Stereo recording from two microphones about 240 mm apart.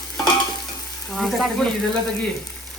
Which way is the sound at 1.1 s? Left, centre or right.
Centre.